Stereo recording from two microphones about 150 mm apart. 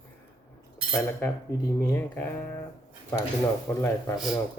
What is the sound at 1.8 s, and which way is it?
Speech, 10° left (ahead or behind).